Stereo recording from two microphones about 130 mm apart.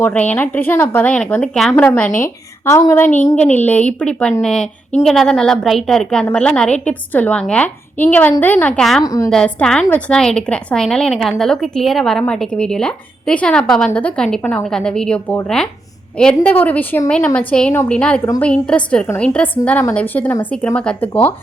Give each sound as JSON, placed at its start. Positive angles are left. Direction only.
{"t": 0.0, "sound": "a woman's voice", "side_deg": 10}
{"t": 2.6, "sound": "a woman's voice", "side_deg": 20}
{"t": 9.0, "sound": "a woman's voice", "side_deg": 25}
{"t": 9.3, "sound": "a woman's voice", "side_deg": 5}